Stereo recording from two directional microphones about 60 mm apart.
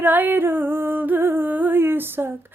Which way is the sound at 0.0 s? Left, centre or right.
Right.